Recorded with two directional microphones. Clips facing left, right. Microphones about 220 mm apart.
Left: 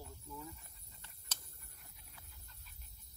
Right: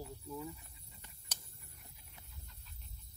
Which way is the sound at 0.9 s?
15° right (ahead or behind).